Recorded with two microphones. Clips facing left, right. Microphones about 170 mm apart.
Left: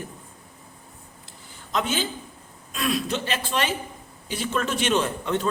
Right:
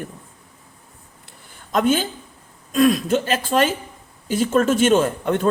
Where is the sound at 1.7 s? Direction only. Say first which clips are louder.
Right 7 dB; 50° right (ahead or behind).